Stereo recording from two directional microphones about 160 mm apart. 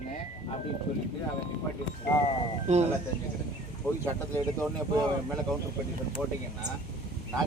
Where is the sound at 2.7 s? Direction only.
45° right (ahead or behind).